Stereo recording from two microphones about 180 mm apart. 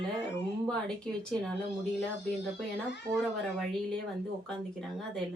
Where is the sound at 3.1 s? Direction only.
20° right (ahead or behind).